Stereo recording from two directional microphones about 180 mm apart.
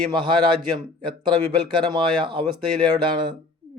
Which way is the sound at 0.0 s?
25° right (ahead or behind).